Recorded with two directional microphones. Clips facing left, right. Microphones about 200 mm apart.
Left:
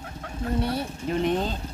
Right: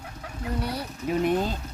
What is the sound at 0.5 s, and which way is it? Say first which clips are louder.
Fowl: left 4 dB; 25° left (ahead or behind).